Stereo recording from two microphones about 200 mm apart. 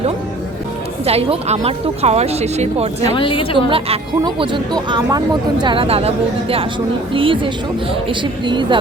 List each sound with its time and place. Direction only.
1.0 s speech: 30° right (ahead or behind)
3.2 s a woman's voice: 25° left (ahead or behind)
3.7 s speech: 25° right (ahead or behind)